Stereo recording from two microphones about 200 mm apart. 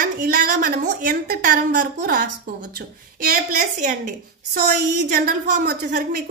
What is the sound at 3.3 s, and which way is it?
A woman's voice, 40° right (ahead or behind).